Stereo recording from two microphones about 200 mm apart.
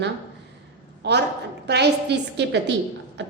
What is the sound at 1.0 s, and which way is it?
A woman's voice, 55° right (ahead or behind).